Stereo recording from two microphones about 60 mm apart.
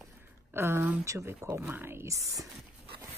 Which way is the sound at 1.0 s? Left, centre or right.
Right.